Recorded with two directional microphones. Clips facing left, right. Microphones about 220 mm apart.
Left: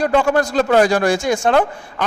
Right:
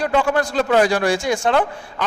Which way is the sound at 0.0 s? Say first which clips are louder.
Left 3 dB; 45° left (ahead or behind).